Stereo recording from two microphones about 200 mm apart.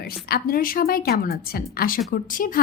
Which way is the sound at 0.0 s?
45° left (ahead or behind).